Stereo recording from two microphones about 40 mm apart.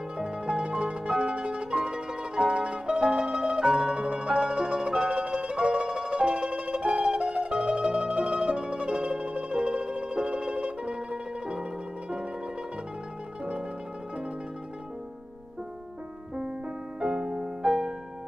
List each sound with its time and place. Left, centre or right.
0.2 s pizzicato: right
4.0 s music: right
17.0 s music: centre